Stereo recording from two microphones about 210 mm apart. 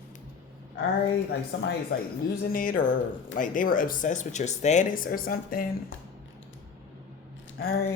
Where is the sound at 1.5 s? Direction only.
60° left (ahead or behind).